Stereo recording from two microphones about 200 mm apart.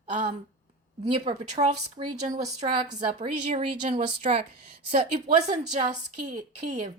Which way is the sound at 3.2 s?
35° right (ahead or behind).